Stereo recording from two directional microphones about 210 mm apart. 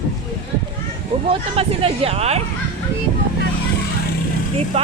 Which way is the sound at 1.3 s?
25° right (ahead or behind).